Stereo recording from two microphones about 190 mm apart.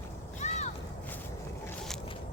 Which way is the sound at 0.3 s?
35° left (ahead or behind).